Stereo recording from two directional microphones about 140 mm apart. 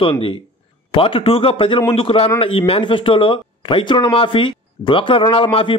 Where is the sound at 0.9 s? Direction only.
40° left (ahead or behind).